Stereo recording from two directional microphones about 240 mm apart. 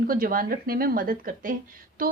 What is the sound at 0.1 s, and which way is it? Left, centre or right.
A woman's voice, right.